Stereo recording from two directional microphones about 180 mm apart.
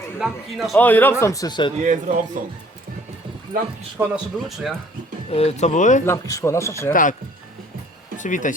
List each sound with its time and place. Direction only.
0.2 s speech: centre (ahead or behind)
0.8 s a man's voice: 10° left (ahead or behind)
1.8 s speech: 45° right (ahead or behind)
3.5 s speech: 50° right (ahead or behind)
3.9 s speech: 5° right (ahead or behind)
5.3 s speech: 35° left (ahead or behind)
6.1 s a man's voice: 15° left (ahead or behind)
6.9 s speech: 45° left (ahead or behind)
8.2 s speech: 45° left (ahead or behind)